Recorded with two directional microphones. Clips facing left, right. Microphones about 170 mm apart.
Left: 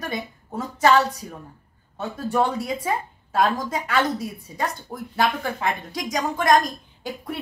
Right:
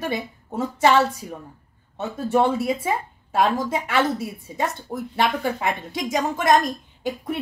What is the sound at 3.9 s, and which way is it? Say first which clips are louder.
Speech: even; 5° right (ahead or behind).